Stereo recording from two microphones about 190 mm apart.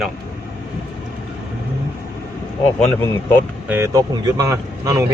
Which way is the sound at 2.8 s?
10° left (ahead or behind).